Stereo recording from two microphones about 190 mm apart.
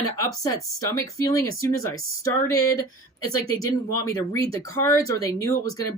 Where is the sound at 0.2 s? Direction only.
20° left (ahead or behind).